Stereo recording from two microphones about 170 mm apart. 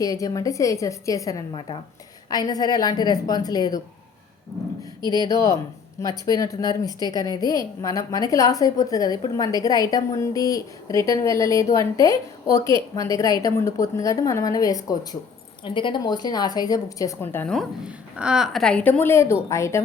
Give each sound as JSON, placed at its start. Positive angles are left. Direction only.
{"t": 0.0, "sound": "a woman's voice", "side_deg": 20}
{"t": 5.2, "sound": "a woman's voice", "side_deg": 20}
{"t": 17.5, "sound": "a woman's voice", "side_deg": 0}